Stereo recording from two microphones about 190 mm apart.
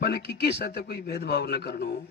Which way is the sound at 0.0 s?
55° left (ahead or behind).